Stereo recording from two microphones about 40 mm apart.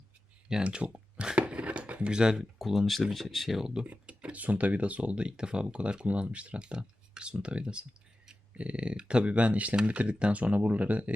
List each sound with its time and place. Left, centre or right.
0.6 s speech: right
0.9 s a sound: right
1.4 s speech: right; by 3.6 s centre
4.0 s speech: right